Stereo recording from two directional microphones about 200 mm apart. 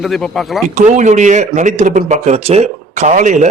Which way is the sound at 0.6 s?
35° right (ahead or behind).